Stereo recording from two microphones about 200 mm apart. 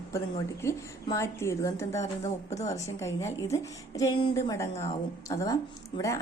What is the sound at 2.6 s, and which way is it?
A woman's voice, 15° left (ahead or behind).